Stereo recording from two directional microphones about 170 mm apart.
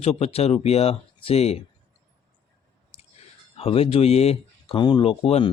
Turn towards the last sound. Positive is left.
turn(degrees=35)  # may be behind; listen again after turning